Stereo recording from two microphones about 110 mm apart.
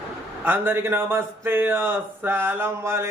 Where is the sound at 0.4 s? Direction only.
20° right (ahead or behind).